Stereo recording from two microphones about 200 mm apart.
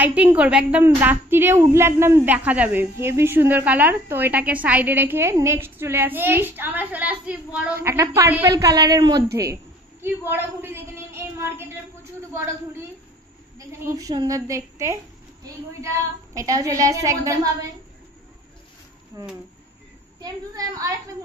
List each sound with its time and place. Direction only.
0.0 s a woman's voice: 10° right (ahead or behind)
13.6 s a woman's voice: 15° right (ahead or behind)
16.3 s a woman's voice: 15° right (ahead or behind)
19.1 s a woman's voice: 15° right (ahead or behind)